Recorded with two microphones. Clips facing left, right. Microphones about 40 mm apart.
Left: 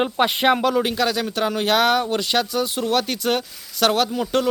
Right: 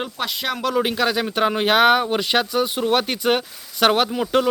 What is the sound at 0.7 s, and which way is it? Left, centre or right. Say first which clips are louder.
Speech: right 1 dB; centre.